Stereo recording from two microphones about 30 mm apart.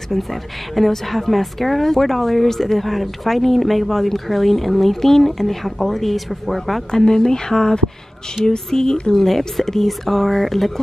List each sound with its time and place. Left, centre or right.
0.1 s speech: centre
6.9 s speech: left; by 10.7 s centre